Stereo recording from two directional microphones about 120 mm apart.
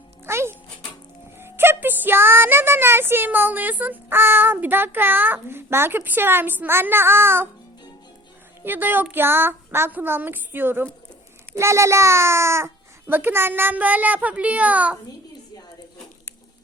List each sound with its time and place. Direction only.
0.3 s music: 20° right (ahead or behind)
8.6 s a child's voice: 15° right (ahead or behind)